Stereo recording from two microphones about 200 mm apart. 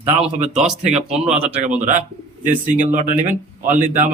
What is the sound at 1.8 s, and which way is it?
A man's voice, 35° right (ahead or behind).